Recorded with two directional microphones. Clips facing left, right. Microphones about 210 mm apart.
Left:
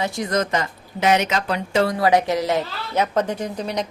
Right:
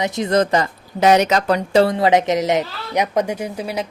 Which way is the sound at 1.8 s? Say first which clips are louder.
Right 3 dB; 25° right (ahead or behind).